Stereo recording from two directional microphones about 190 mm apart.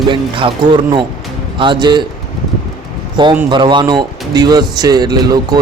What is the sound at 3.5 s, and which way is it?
Speech, 25° right (ahead or behind).